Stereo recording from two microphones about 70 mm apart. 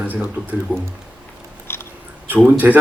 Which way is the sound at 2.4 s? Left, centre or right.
Right.